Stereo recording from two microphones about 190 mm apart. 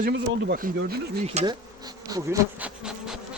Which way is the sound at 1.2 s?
35° right (ahead or behind).